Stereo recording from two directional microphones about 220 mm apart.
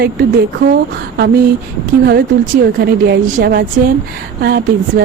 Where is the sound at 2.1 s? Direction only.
40° right (ahead or behind).